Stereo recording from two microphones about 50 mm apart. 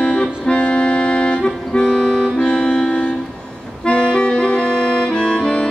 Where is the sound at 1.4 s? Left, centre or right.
Centre.